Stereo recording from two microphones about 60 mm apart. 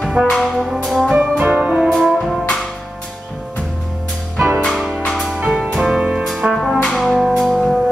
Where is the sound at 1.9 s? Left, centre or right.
Centre.